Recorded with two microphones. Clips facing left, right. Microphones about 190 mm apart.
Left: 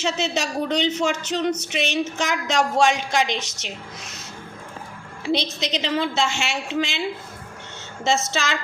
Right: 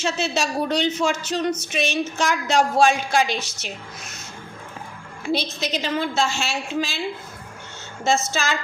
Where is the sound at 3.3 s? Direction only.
10° right (ahead or behind).